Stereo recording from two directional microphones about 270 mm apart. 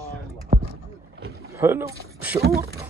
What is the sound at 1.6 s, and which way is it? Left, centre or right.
Speech, centre.